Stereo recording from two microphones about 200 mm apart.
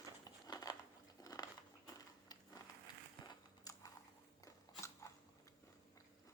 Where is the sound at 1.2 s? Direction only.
20° left (ahead or behind).